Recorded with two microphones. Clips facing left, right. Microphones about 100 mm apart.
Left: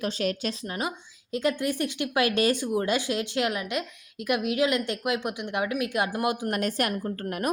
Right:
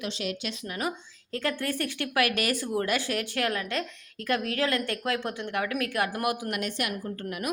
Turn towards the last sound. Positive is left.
turn(degrees=45)  # may be behind; listen again after turning